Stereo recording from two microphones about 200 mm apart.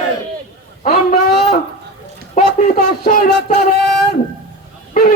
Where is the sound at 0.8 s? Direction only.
40° left (ahead or behind).